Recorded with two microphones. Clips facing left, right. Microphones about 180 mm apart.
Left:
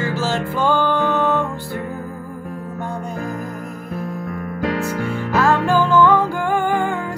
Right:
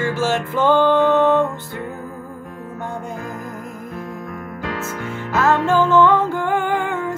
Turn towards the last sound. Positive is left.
turn(degrees=-20)  # may be behind; listen again after turning